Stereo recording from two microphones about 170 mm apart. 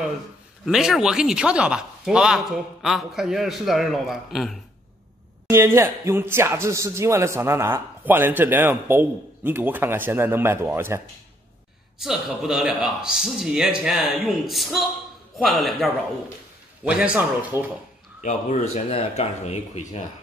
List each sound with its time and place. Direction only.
0.7 s speech: 5° right (ahead or behind)
5.5 s speech: 15° right (ahead or behind)
12.0 s speech: centre (ahead or behind)
18.2 s speech: 45° left (ahead or behind)